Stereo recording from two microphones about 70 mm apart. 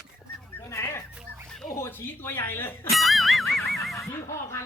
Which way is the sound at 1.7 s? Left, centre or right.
Left.